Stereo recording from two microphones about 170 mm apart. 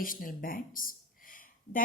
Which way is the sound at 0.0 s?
55° left (ahead or behind).